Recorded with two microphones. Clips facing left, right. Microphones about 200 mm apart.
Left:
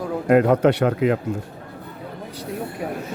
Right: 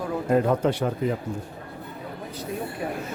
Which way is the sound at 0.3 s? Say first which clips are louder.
Left 6 dB; 70° left (ahead or behind).